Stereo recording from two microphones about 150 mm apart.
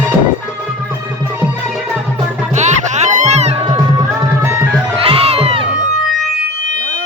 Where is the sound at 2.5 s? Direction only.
50° right (ahead or behind).